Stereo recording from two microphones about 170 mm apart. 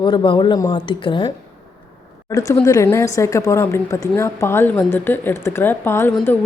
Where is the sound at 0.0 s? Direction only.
30° left (ahead or behind).